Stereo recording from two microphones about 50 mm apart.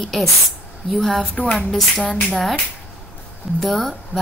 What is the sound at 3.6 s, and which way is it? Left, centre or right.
Speech, centre.